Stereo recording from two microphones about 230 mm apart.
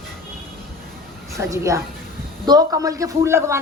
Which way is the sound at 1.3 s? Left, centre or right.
Centre.